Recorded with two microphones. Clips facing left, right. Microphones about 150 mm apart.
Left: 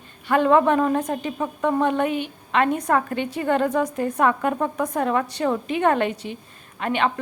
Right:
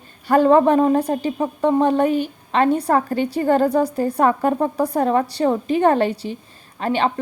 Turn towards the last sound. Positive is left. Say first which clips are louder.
# right 3 dB
turn(degrees=-35)  # may be behind; listen again after turning